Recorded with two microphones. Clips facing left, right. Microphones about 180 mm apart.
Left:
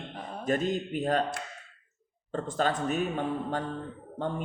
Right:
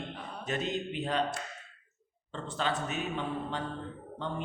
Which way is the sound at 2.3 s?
45° left (ahead or behind).